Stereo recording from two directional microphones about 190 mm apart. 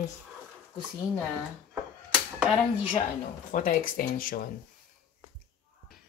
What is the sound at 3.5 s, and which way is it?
Speech, 45° left (ahead or behind).